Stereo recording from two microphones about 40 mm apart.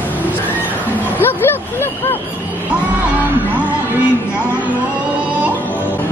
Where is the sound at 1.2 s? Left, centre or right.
Left.